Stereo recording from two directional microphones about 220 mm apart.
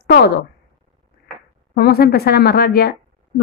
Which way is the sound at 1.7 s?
45° left (ahead or behind).